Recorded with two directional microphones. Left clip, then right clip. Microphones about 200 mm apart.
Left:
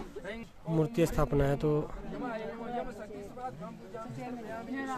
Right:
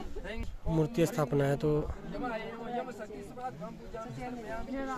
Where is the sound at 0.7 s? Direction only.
5° left (ahead or behind).